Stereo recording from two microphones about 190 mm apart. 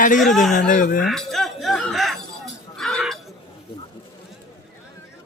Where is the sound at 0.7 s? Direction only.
45° left (ahead or behind).